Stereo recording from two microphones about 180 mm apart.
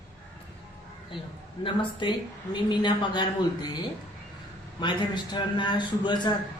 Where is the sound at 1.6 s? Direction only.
25° left (ahead or behind).